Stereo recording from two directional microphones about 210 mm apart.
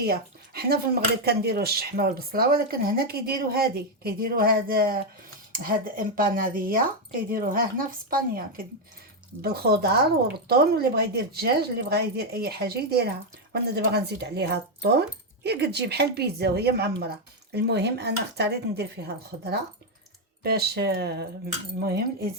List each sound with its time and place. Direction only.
0.0 s a woman's voice: 50° right (ahead or behind)